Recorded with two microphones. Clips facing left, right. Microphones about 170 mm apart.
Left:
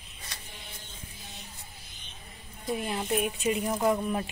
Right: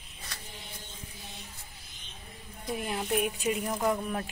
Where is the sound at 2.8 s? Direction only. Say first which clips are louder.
Right 1 dB; 5° right (ahead or behind).